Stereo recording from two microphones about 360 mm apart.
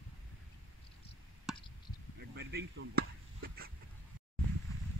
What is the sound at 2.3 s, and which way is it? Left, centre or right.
Chop, right.